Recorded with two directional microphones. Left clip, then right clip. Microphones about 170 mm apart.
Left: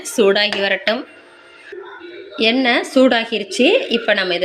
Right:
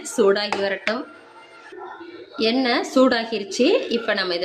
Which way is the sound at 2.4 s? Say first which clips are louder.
Left 5 dB; 10° left (ahead or behind).